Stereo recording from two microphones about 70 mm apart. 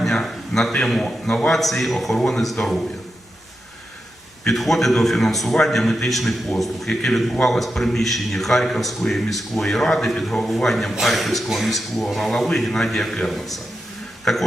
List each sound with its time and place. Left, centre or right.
0.0 s a man's voice: centre
4.4 s a man's voice: centre